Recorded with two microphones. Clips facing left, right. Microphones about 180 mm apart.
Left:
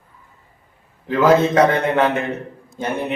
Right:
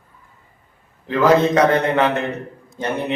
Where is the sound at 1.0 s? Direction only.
5° left (ahead or behind).